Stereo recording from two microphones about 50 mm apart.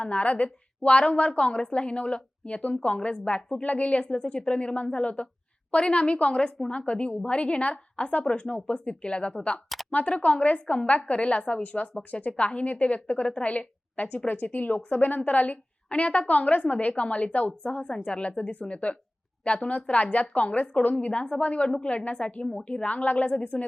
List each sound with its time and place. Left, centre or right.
0.0 s a woman's voice: left